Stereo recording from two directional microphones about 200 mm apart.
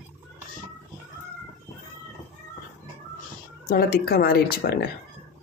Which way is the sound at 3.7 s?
50° left (ahead or behind).